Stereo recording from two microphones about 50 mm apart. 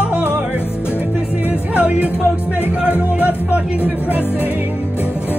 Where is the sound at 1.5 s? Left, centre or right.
Right.